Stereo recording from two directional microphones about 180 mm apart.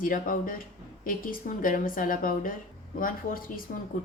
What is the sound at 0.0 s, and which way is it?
A woman's voice, 50° left (ahead or behind).